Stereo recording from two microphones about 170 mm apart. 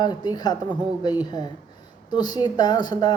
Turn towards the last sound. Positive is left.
turn(degrees=25)  # may be behind; listen again after turning